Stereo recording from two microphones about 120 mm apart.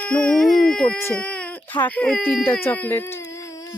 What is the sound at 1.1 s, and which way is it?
Baby cry, 10° left (ahead or behind).